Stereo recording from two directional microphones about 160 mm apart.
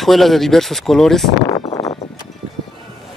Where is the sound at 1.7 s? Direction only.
25° left (ahead or behind).